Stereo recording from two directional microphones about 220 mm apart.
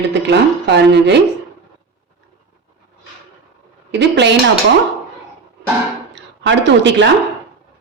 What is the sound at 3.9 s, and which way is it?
Speech, 50° right (ahead or behind).